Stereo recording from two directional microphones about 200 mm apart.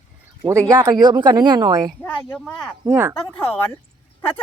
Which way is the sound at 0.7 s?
15° right (ahead or behind).